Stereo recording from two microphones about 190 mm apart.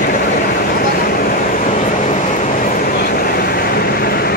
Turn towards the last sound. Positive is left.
turn(degrees=55)  # may be behind; listen again after turning